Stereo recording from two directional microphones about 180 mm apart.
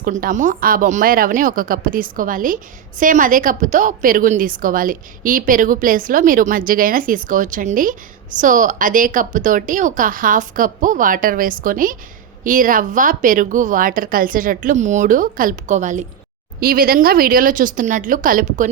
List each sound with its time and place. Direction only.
0.0 s a woman's voice: 50° right (ahead or behind)
16.6 s a woman's voice: 55° right (ahead or behind)